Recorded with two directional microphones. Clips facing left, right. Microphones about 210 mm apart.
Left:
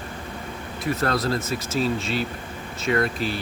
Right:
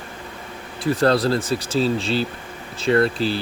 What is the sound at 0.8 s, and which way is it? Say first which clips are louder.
Speech: right 6 dB; 30° right (ahead or behind).